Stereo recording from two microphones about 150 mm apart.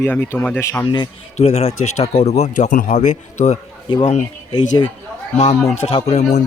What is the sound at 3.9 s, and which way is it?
A man's voice, 35° left (ahead or behind).